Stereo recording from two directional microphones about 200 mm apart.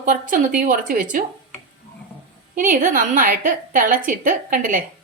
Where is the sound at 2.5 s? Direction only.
40° right (ahead or behind).